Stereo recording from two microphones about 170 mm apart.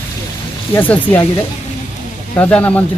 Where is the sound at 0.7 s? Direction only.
10° left (ahead or behind).